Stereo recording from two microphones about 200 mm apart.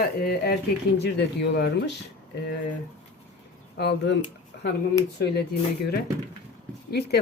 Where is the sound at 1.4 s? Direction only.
55° left (ahead or behind).